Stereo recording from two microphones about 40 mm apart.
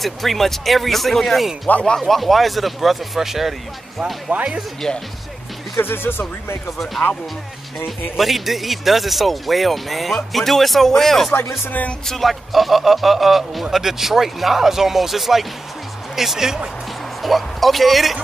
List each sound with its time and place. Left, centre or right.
0.0 s a man's voice: centre
4.0 s speech: right
4.8 s speech: centre
5.8 s speech: left
8.2 s a man's voice: centre
17.2 s a man's voice: centre